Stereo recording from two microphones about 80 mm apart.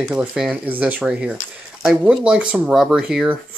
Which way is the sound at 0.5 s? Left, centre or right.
Centre.